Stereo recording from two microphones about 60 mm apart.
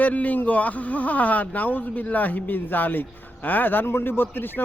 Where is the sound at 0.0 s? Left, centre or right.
Left.